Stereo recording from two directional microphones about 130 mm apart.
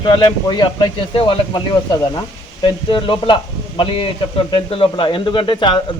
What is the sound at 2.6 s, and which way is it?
Speech, 40° left (ahead or behind).